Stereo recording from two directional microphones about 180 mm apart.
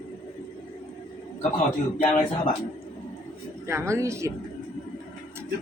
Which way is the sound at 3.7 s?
15° right (ahead or behind).